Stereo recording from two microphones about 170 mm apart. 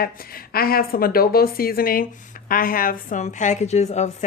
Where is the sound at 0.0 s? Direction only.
60° left (ahead or behind).